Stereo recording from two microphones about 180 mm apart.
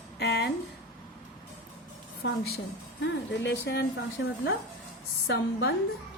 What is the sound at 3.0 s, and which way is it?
Speech, 75° left (ahead or behind).